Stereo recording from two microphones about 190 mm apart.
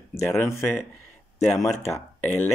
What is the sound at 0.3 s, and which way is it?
Speech, 15° left (ahead or behind).